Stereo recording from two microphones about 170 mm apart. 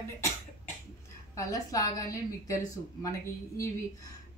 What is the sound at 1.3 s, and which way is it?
A woman's voice, 20° left (ahead or behind).